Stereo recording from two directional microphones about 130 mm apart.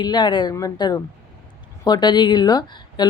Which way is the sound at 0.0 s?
35° left (ahead or behind).